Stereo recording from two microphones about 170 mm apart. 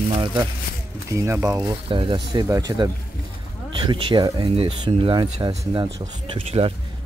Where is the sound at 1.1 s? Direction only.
15° right (ahead or behind); by 6.7 s 35° right (ahead or behind).